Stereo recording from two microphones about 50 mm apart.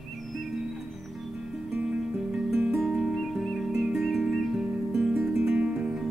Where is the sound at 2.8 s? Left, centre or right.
Centre.